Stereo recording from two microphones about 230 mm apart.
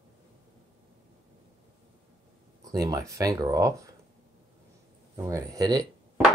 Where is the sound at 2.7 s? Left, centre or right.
Centre.